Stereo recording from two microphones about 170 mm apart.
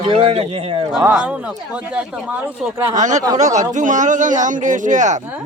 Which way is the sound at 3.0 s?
45° right (ahead or behind).